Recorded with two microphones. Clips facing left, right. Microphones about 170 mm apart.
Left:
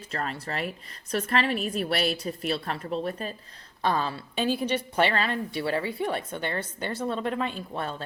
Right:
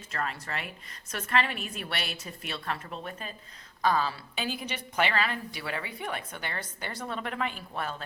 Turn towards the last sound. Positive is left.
turn(degrees=25)  # may be behind; listen again after turning